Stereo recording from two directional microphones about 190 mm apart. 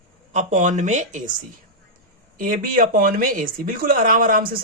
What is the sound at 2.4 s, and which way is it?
Speech, 45° right (ahead or behind).